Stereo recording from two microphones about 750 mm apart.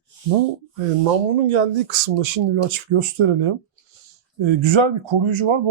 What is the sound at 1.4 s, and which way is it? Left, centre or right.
Speech, right.